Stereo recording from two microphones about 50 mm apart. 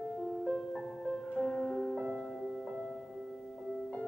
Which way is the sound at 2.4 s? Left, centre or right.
Centre.